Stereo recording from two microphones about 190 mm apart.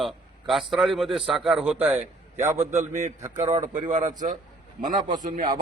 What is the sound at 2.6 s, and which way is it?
A man's voice, 40° right (ahead or behind).